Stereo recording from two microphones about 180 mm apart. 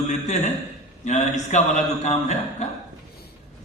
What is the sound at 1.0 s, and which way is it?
A man's voice, 40° left (ahead or behind).